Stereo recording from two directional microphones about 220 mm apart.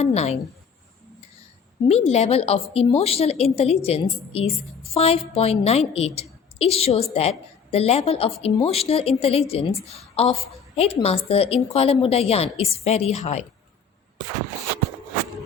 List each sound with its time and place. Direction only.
0.0 s a woman's voice: 30° left (ahead or behind)
1.9 s a woman's voice: 30° left (ahead or behind)